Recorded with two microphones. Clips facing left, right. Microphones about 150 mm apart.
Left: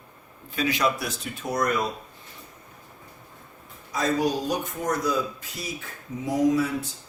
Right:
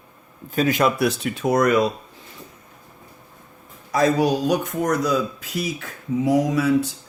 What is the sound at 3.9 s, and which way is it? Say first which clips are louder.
Speech: right 6 dB; 75° right (ahead or behind).